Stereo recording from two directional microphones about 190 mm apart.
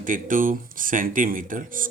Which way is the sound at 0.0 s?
45° right (ahead or behind).